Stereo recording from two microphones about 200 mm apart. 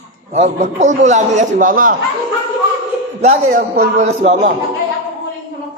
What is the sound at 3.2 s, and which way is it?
A man's voice, 40° right (ahead or behind).